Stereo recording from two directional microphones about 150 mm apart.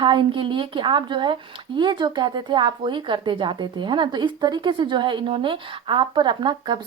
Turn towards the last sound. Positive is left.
turn(degrees=-30)  # may be behind; listen again after turning